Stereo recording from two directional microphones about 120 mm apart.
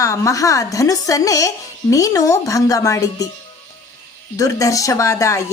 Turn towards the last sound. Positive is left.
turn(degrees=25)  # may be behind; listen again after turning